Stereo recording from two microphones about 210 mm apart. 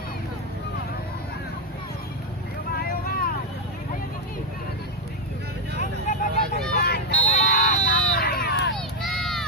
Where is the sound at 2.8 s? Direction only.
45° left (ahead or behind).